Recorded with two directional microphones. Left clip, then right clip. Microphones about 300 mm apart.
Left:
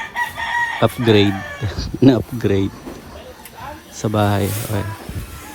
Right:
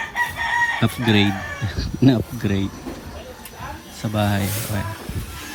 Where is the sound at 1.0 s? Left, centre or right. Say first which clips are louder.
Left 3 dB; centre.